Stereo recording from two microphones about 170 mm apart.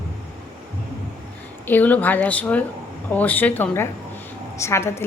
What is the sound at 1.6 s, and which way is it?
A woman's voice, 10° left (ahead or behind).